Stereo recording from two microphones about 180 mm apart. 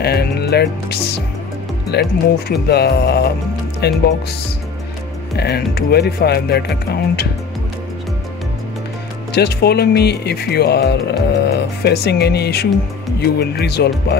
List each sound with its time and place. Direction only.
0.0 s speech: 65° left (ahead or behind)
5.3 s speech: 65° left (ahead or behind)
9.3 s speech: 65° left (ahead or behind)